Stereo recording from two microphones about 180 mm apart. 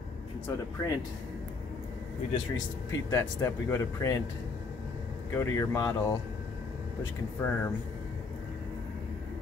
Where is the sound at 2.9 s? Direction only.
15° left (ahead or behind).